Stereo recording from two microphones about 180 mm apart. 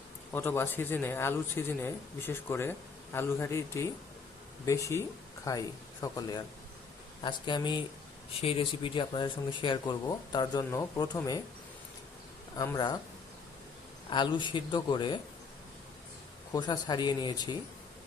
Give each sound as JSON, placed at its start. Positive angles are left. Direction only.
{"t": 0.3, "sound": "speech", "side_deg": 10}
{"t": 12.5, "sound": "speech", "side_deg": 20}
{"t": 14.1, "sound": "speech", "side_deg": 25}
{"t": 16.5, "sound": "speech", "side_deg": 25}